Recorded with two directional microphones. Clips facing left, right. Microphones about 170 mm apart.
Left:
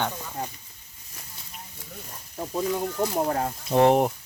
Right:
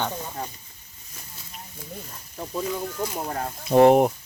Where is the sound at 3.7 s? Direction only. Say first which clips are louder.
Right 4 dB; 10° right (ahead or behind).